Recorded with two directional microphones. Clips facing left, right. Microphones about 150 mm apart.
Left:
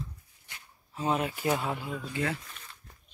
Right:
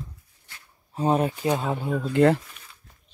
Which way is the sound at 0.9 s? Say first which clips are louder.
Right 7 dB; 35° right (ahead or behind).